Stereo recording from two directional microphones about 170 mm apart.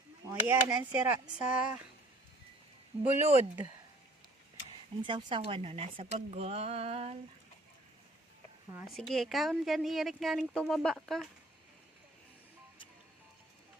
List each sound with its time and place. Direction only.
0.3 s a woman's voice: 15° right (ahead or behind)
2.9 s a woman's voice: 35° right (ahead or behind)
5.0 s a woman's voice: 30° right (ahead or behind)
8.9 s speech: centre (ahead or behind)